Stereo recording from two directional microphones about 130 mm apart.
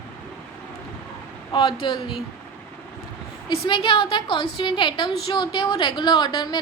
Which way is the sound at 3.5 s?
40° left (ahead or behind).